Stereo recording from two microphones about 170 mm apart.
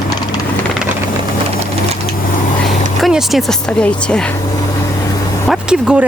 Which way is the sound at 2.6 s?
Centre (ahead or behind).